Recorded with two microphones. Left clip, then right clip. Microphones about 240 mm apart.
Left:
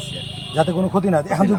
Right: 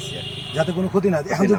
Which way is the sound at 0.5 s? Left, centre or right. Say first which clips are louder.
Left 3 dB; centre.